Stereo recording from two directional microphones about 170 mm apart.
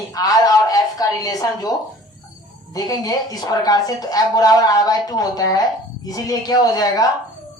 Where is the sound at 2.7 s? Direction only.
20° left (ahead or behind).